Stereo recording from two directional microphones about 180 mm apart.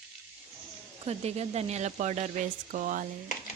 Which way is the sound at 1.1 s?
35° right (ahead or behind).